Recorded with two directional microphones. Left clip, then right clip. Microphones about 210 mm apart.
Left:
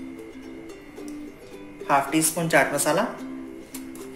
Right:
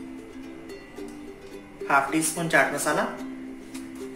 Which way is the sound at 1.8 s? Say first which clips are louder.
Left 1 dB; 35° left (ahead or behind).